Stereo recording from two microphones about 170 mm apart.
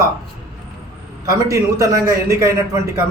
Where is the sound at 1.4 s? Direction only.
15° right (ahead or behind).